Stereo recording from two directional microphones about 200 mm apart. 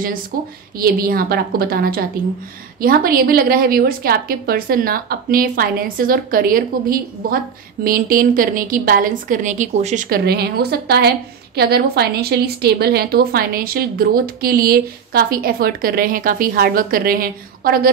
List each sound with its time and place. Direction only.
0.7 s a woman's voice: 45° right (ahead or behind)